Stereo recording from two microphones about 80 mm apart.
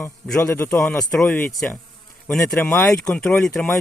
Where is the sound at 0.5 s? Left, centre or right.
Left.